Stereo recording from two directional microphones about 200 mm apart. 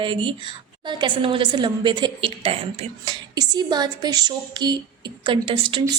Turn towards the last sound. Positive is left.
turn(degrees=-25)  # may be behind; listen again after turning